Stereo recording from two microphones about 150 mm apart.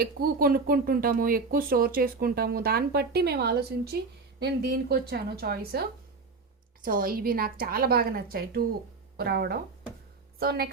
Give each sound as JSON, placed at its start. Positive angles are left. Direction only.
{"t": 0.0, "sound": "a woman's voice", "side_deg": -85}
{"t": 6.8, "sound": "a woman's voice", "side_deg": -70}